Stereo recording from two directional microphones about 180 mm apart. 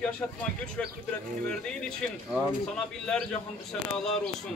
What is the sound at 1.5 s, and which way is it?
Speech, 5° left (ahead or behind).